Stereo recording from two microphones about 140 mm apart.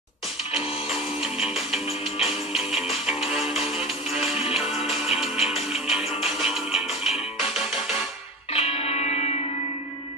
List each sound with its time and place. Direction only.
0.5 s music: centre (ahead or behind)
8.5 s music: 50° left (ahead or behind)